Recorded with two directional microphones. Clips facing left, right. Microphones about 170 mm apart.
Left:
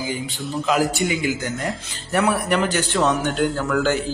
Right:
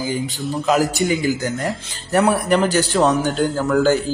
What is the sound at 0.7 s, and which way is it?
A man's voice, 40° right (ahead or behind).